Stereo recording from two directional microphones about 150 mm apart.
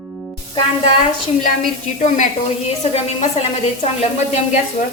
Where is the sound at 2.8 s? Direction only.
45° left (ahead or behind).